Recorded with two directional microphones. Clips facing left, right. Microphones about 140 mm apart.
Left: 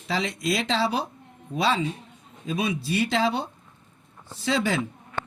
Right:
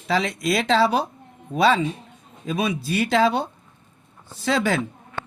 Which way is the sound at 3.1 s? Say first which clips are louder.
Right 7 dB; 50° right (ahead or behind).